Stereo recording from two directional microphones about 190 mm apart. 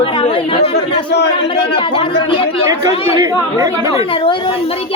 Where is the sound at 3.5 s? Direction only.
20° right (ahead or behind).